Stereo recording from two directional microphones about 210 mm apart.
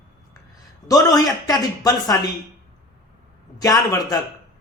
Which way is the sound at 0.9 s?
20° left (ahead or behind).